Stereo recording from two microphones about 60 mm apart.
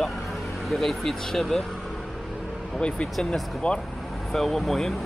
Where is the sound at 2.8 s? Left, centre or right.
Centre.